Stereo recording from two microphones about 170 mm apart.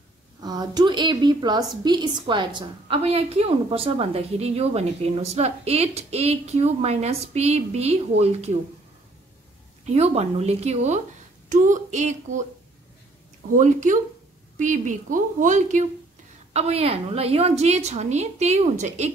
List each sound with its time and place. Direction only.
0.4 s a woman's voice: 25° right (ahead or behind)
9.8 s a woman's voice: 40° right (ahead or behind)
13.6 s a woman's voice: 45° right (ahead or behind)